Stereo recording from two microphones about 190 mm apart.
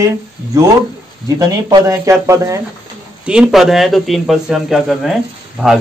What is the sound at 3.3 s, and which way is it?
Speech, 5° right (ahead or behind).